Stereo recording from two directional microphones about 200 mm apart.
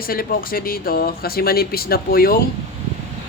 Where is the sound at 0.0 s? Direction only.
45° left (ahead or behind).